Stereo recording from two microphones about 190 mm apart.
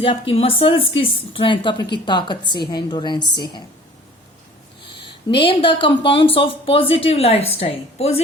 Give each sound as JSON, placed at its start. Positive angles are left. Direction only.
{"t": 0.0, "sound": "a woman's voice", "side_deg": 30}
{"t": 5.0, "sound": "a woman's voice", "side_deg": 25}